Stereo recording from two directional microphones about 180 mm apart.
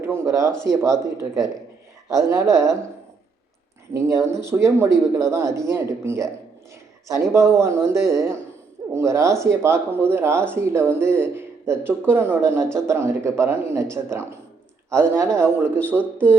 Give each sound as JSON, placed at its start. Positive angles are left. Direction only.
{"t": 0.3, "sound": "a man's voice", "side_deg": -15}
{"t": 2.0, "sound": "a man's voice", "side_deg": -20}
{"t": 3.9, "sound": "a man's voice", "side_deg": -15}